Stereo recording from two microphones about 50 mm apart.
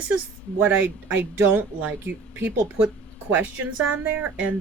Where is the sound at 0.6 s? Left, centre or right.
Right.